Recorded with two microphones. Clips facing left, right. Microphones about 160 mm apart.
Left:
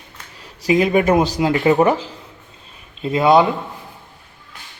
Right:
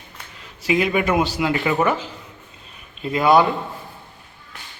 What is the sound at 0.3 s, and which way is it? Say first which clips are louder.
Speech: left 4 dB; 35° left (ahead or behind).